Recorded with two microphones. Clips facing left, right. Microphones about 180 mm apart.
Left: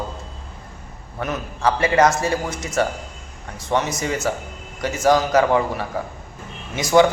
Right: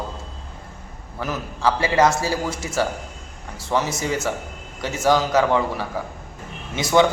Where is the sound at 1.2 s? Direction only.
Centre (ahead or behind).